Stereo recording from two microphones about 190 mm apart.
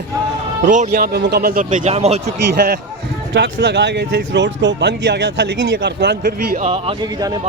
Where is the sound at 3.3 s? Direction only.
65° right (ahead or behind).